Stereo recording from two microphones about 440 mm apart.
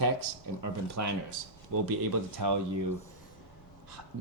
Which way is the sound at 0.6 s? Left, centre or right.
Right.